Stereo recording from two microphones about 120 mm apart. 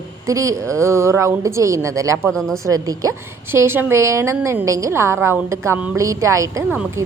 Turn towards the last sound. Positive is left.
turn(degrees=-25)  # may be behind; listen again after turning